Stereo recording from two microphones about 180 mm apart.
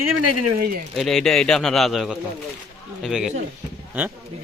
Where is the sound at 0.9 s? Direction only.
Centre (ahead or behind).